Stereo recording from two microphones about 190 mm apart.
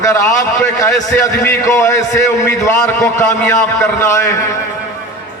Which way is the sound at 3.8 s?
15° left (ahead or behind).